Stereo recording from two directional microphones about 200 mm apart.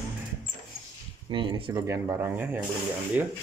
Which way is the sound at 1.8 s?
15° right (ahead or behind).